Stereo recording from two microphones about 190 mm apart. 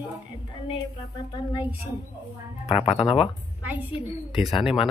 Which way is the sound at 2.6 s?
30° left (ahead or behind).